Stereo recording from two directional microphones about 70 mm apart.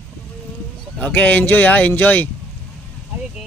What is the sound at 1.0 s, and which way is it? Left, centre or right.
Speech, left.